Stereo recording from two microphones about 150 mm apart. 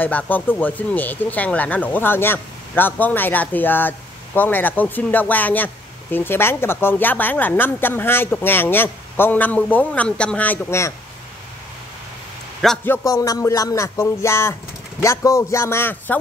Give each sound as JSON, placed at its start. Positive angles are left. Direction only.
{"t": 0.0, "sound": "speech", "side_deg": 10}
{"t": 12.8, "sound": "music", "side_deg": 20}